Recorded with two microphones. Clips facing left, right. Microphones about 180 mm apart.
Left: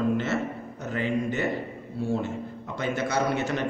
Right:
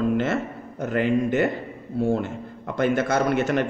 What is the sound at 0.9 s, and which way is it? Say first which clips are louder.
Speech: right 6 dB; 55° right (ahead or behind).